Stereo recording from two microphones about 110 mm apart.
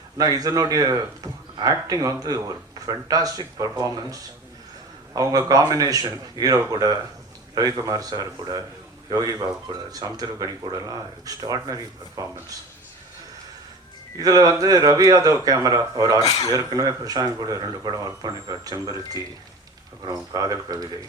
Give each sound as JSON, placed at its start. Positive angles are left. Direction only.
{"t": 0.2, "sound": "speech", "side_deg": -35}
{"t": 14.2, "sound": "speech", "side_deg": -35}